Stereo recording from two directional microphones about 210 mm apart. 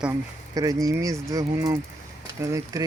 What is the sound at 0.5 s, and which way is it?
Speech, 15° right (ahead or behind).